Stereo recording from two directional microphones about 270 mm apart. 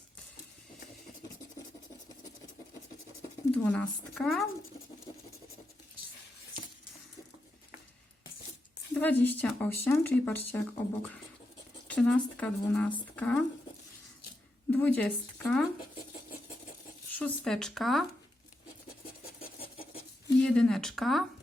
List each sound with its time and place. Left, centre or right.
3.5 s speech: centre
9.0 s speech: centre
11.9 s speech: centre
14.7 s speech: centre
17.2 s speech: centre
19.4 s a sound: left
20.4 s speech: centre